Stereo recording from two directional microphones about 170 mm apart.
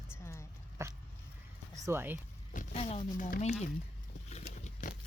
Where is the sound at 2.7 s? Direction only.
35° left (ahead or behind).